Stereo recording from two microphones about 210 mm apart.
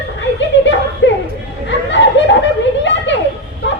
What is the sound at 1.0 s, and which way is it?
Chatter, 60° left (ahead or behind).